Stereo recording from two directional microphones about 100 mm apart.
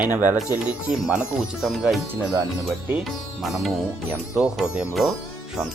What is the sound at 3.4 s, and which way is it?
Speech, centre (ahead or behind).